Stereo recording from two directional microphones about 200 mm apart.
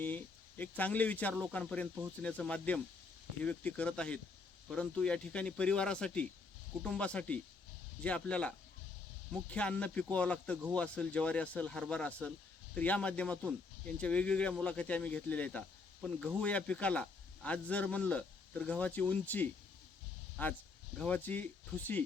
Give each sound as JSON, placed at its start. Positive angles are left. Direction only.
{"t": 0.0, "sound": "speech", "side_deg": 10}